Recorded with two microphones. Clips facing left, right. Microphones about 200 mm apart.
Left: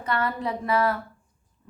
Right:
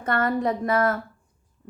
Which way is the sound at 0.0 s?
50° right (ahead or behind).